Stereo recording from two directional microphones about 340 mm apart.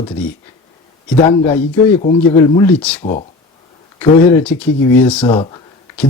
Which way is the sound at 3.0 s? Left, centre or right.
Centre.